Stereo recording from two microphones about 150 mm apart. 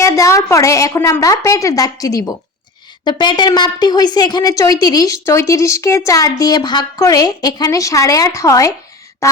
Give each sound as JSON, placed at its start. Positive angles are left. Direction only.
{"t": 0.0, "sound": "a woman's voice", "side_deg": 20}